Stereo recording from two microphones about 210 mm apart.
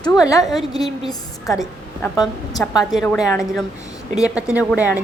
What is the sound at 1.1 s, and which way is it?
A woman's voice, 15° left (ahead or behind).